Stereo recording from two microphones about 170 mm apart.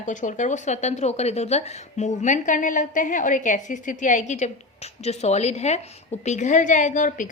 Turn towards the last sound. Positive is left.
turn(degrees=50)  # may be behind; listen again after turning